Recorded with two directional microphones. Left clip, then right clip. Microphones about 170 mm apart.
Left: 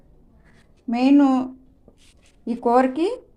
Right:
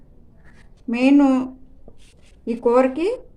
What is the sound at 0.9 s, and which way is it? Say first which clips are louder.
Speech: right 1 dB; 25° left (ahead or behind).